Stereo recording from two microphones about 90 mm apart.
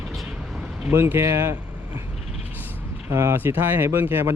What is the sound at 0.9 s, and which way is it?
Speech, 25° right (ahead or behind).